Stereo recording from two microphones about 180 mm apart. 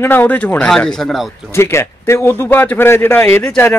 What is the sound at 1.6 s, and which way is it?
Speech, 15° left (ahead or behind).